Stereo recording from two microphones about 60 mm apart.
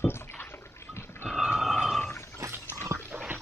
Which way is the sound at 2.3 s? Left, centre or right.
Right.